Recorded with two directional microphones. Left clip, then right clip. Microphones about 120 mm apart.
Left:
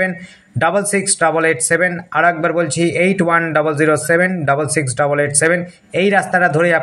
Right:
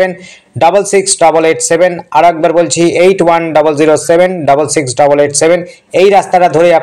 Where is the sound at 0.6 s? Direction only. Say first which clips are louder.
Right 8 dB; 15° right (ahead or behind).